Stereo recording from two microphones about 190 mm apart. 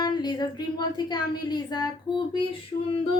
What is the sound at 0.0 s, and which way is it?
Speech, 20° left (ahead or behind).